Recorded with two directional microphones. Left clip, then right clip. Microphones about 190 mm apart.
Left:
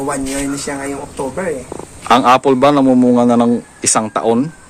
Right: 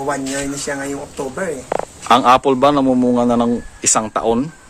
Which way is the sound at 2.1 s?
5° right (ahead or behind).